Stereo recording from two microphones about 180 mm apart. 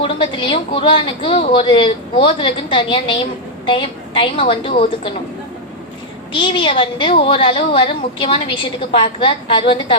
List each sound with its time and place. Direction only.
0.0 s a woman's voice: 30° left (ahead or behind)
6.3 s a woman's voice: 30° left (ahead or behind)